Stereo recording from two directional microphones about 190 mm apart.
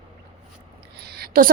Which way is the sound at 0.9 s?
55° right (ahead or behind).